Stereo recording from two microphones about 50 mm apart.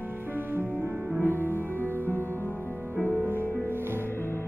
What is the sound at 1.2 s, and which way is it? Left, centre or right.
Music, left.